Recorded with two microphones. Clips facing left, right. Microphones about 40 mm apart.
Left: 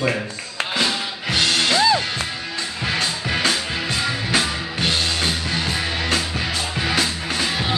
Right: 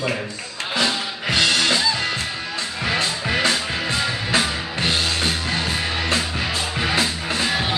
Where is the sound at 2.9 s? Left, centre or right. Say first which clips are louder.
Right 1 dB; right.